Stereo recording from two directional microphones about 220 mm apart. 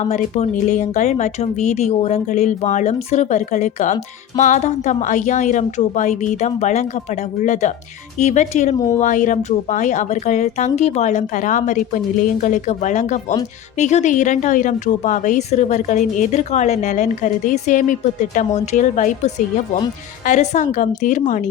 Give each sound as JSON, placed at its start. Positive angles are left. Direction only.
{"t": 0.0, "sound": "a woman's voice", "side_deg": 30}